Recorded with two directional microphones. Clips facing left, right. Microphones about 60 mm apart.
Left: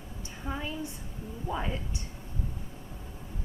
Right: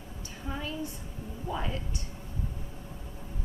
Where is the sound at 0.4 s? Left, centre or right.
Centre.